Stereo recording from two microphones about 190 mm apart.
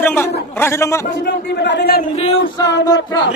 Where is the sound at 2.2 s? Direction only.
30° left (ahead or behind).